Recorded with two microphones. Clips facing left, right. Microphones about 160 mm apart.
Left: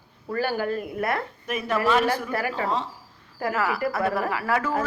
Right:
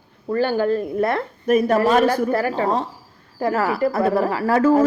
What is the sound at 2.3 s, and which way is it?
Speech, 30° right (ahead or behind).